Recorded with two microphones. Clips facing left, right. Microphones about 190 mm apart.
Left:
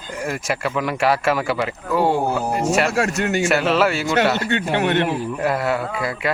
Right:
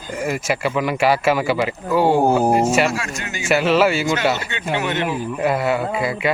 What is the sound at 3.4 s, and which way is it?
Speech, centre (ahead or behind).